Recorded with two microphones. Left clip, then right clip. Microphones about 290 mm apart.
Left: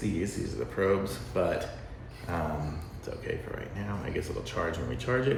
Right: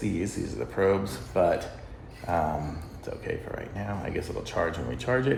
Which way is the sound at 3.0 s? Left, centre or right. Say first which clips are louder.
Right 2 dB; centre.